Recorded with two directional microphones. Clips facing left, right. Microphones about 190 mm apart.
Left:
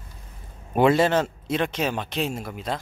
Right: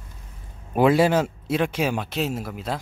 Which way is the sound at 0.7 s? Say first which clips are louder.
Right 1 dB; 5° right (ahead or behind).